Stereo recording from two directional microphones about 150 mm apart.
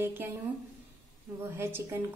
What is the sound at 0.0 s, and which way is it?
Speech, 15° right (ahead or behind).